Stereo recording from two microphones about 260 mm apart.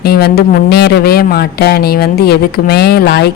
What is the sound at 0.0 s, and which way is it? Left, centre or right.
Speech, left.